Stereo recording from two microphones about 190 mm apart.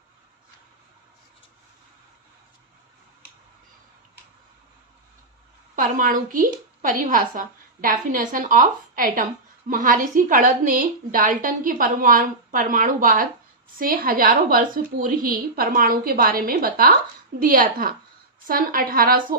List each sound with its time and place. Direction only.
5.7 s a woman's voice: 45° right (ahead or behind)